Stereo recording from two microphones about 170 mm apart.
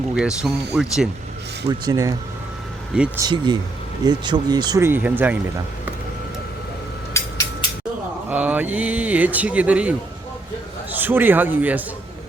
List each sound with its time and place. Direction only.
0.1 s speech: 5° right (ahead or behind)
1.8 s speech: 20° right (ahead or behind)
3.2 s speech: 25° right (ahead or behind)
4.9 s speech: 10° right (ahead or behind)
7.1 s a sound: 15° left (ahead or behind)
8.3 s speech: 10° right (ahead or behind)
10.9 s speech: 10° right (ahead or behind)